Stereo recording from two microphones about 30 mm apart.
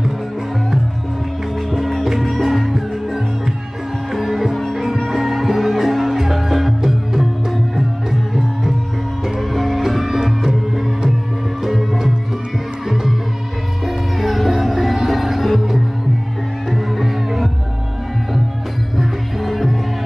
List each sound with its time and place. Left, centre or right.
2.0 s music: centre
10.2 s music: centre
11.6 s music: centre
13.8 s music: centre
16.7 s music: centre
18.9 s music: centre